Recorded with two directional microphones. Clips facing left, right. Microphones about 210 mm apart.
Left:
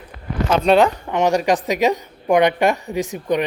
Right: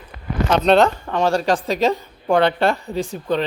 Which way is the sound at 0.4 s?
5° left (ahead or behind).